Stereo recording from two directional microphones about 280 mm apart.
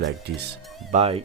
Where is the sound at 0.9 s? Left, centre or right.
Right.